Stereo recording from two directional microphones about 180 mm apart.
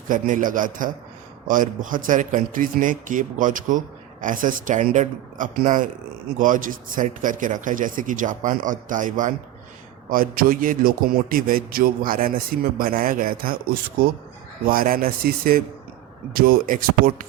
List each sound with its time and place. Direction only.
0.1 s speech: 45° right (ahead or behind)